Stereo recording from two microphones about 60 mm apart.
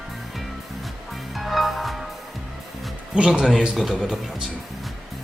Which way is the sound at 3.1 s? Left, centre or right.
Centre.